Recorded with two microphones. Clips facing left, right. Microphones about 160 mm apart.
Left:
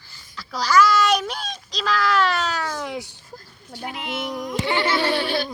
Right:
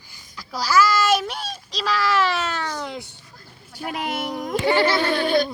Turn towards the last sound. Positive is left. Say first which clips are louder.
# right 3 dB
turn(degrees=-45)  # may be behind; listen again after turning